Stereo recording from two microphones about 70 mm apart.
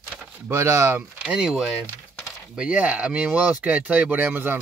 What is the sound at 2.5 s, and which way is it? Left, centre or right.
Speech, centre.